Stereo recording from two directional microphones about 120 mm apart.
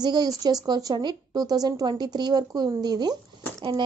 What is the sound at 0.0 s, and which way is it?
Speech, 35° right (ahead or behind).